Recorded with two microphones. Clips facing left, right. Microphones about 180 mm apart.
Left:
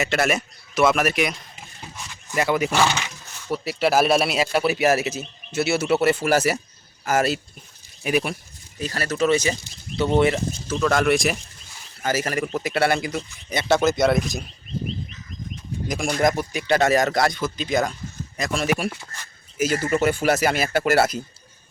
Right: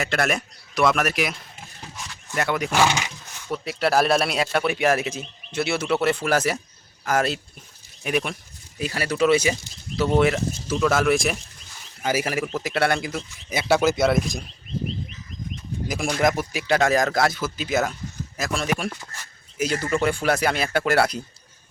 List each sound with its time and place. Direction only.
0.0 s speech: 5° left (ahead or behind)
8.8 s speech: 10° right (ahead or behind)
12.0 s speech: 10° right (ahead or behind)
16.0 s speech: centre (ahead or behind)